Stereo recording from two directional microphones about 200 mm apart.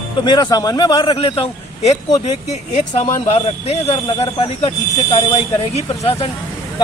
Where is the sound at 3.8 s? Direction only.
30° left (ahead or behind).